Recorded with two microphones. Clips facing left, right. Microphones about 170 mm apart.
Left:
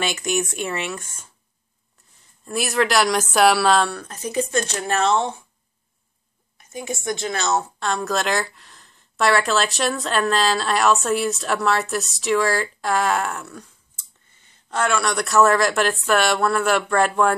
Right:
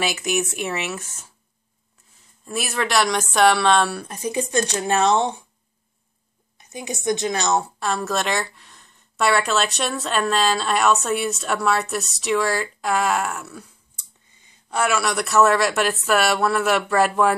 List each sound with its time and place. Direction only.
0.0 s a woman's voice: 5° right (ahead or behind)
2.4 s a woman's voice: centre (ahead or behind)
3.9 s speech: 15° right (ahead or behind)
6.7 s a woman's voice: 20° right (ahead or behind)
7.8 s a woman's voice: centre (ahead or behind)
13.9 s speech: 15° right (ahead or behind)